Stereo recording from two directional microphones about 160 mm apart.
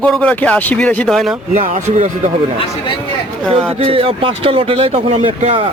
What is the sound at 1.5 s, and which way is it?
Speech, 45° right (ahead or behind).